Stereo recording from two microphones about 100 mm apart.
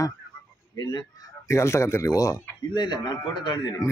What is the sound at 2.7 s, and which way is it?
A man's voice, 45° left (ahead or behind).